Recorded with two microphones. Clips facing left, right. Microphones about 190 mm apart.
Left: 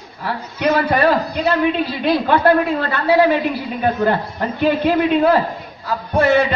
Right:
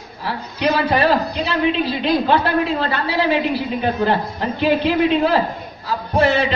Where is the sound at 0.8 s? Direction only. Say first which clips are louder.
Left 1 dB; 50° left (ahead or behind).